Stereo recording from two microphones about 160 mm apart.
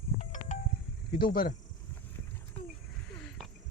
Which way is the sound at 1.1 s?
65° left (ahead or behind).